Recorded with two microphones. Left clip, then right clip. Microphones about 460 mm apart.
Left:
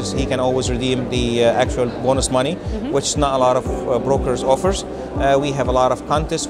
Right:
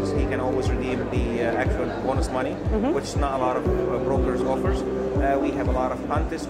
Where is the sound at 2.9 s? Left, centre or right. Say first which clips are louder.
Left 8 dB; left.